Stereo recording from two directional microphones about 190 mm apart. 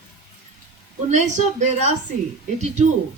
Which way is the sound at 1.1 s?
40° right (ahead or behind).